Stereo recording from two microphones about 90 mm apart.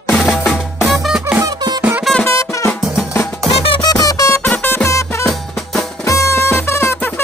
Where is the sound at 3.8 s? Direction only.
45° left (ahead or behind).